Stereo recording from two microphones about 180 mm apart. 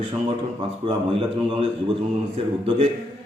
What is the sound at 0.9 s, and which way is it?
Speech, 30° right (ahead or behind).